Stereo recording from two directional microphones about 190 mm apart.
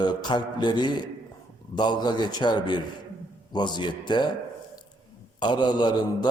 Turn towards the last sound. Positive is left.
turn(degrees=25)  # may be behind; listen again after turning